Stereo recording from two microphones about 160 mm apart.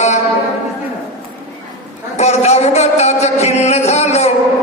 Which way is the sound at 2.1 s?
45° left (ahead or behind).